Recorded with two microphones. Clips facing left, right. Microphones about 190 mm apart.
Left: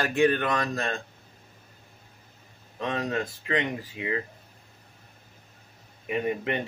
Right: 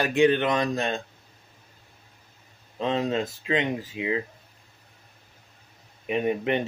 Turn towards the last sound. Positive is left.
turn(degrees=-20)  # may be behind; listen again after turning